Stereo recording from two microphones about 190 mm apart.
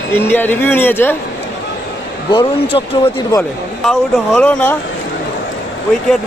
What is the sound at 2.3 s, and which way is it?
Speech, 25° left (ahead or behind).